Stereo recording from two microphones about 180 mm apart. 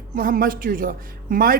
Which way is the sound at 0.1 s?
50° right (ahead or behind).